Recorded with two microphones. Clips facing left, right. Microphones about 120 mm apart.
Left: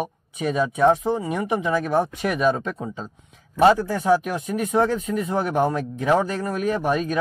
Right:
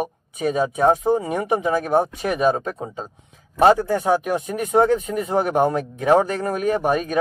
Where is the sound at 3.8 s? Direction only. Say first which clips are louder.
Even; 50° right (ahead or behind).